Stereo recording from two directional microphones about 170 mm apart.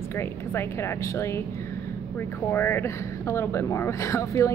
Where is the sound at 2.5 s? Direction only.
10° left (ahead or behind).